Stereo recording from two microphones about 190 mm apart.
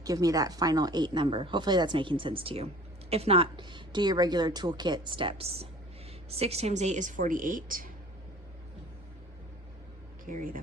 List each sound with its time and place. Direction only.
0.0 s a woman's voice: 20° right (ahead or behind); by 7.9 s 45° right (ahead or behind)
10.2 s speech: 45° right (ahead or behind)